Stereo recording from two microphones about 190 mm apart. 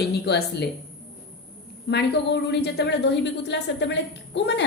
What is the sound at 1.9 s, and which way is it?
A woman's voice, 60° left (ahead or behind).